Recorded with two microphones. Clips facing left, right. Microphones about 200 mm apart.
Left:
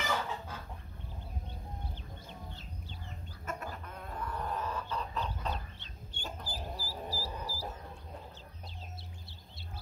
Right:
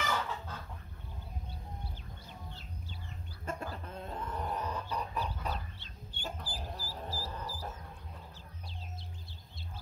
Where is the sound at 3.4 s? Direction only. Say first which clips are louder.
Right 1 dB; 30° right (ahead or behind); by 5.5 s 10° right (ahead or behind).